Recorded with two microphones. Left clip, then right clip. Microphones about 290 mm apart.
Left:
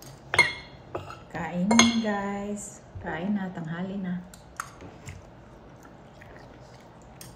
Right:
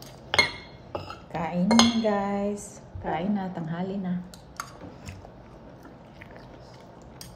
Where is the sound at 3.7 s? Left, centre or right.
Centre.